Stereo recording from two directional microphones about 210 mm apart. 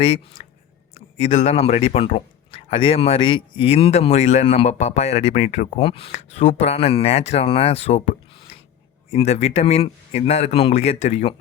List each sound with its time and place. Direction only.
0.0 s speech: 30° left (ahead or behind)